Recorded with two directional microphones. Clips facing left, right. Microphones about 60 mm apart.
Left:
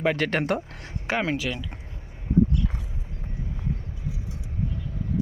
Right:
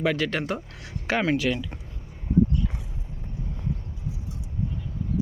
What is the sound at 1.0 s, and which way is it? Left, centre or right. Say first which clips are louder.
Speech: right 1 dB; left.